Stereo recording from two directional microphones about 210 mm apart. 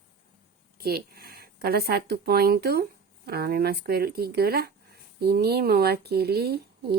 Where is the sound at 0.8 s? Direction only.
45° right (ahead or behind).